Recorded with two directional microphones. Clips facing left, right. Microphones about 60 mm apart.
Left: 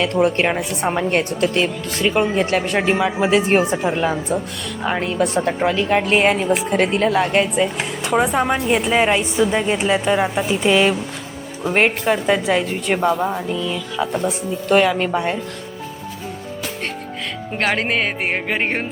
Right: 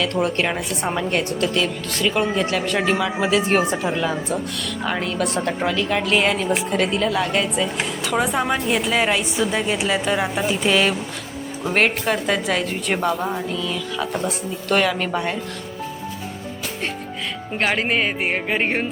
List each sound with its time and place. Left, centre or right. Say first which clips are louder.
0.0 s a woman's voice: left 4 dB; left
4.9 s a woman's voice: left 4 dB; left
14.7 s a woman's voice: left 4 dB; centre
17.6 s speech: left 1 dB; left
18.3 s speech: left 1 dB; left